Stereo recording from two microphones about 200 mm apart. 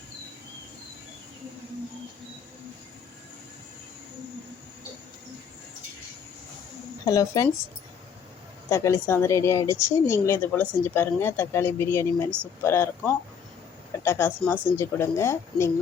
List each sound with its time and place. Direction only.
7.0 s a woman's voice: 20° left (ahead or behind)
8.7 s a woman's voice: 15° left (ahead or behind)